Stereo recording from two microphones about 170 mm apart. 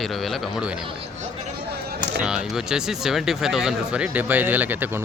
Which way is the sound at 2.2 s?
5° right (ahead or behind).